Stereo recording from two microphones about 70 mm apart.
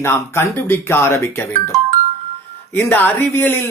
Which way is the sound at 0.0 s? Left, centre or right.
Left.